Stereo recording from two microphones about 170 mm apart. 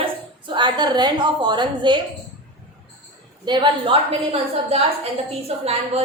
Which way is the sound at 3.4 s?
25° right (ahead or behind).